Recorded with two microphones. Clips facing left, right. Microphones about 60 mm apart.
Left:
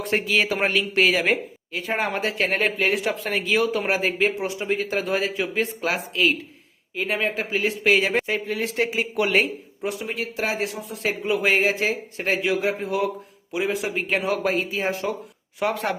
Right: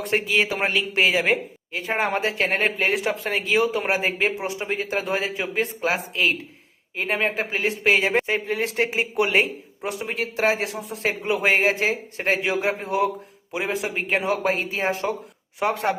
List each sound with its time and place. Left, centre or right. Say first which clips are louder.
0.1 s speech: even; right
0.4 s speech: left 1 dB; centre
0.8 s speech: even; centre